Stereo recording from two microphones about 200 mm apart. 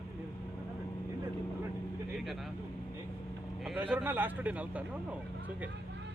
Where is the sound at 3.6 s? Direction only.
5° right (ahead or behind).